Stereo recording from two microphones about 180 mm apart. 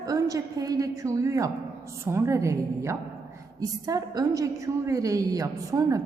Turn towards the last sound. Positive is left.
turn(degrees=-20)  # may be behind; listen again after turning